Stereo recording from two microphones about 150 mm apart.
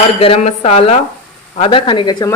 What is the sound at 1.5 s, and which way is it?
Speech, 35° left (ahead or behind).